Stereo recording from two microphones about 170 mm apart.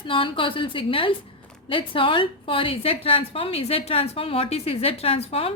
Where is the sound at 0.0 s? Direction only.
30° left (ahead or behind).